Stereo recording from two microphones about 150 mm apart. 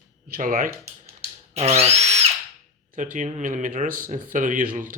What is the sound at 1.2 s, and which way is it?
Drill, 45° right (ahead or behind).